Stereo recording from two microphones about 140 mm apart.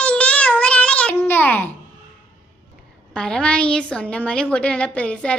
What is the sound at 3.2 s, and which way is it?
A woman's voice, 5° left (ahead or behind).